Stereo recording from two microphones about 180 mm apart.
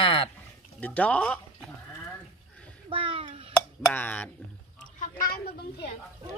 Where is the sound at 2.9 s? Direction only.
30° right (ahead or behind).